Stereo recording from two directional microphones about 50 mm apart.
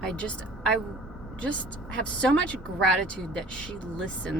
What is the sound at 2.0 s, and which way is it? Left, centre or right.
Speech, left.